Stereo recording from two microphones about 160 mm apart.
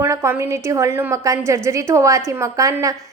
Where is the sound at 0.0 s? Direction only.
15° right (ahead or behind).